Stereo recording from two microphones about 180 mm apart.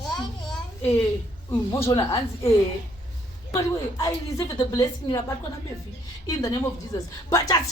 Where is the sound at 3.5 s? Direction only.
20° left (ahead or behind).